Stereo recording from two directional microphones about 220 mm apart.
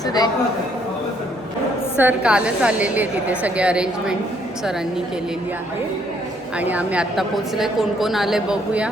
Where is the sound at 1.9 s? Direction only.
5° right (ahead or behind).